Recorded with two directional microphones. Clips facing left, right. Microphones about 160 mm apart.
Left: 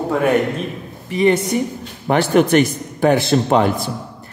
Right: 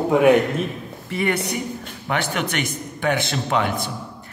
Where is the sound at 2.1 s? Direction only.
40° left (ahead or behind).